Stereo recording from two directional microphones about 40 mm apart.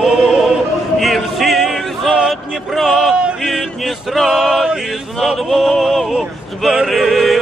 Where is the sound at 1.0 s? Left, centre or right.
Centre.